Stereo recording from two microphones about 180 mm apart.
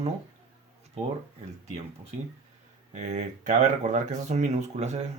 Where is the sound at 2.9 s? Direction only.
45° right (ahead or behind).